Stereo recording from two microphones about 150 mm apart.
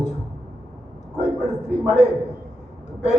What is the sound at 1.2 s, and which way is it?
Speech, 50° left (ahead or behind).